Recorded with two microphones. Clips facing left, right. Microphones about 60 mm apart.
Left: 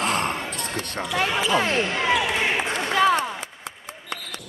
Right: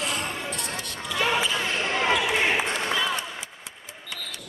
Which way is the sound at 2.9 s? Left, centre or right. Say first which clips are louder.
Left 12 dB; left.